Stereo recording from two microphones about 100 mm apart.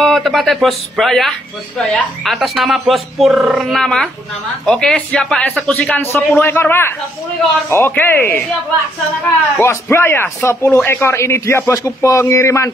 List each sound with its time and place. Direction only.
0.0 s a woman's voice: centre (ahead or behind)
5.9 s a man's voice: 20° left (ahead or behind)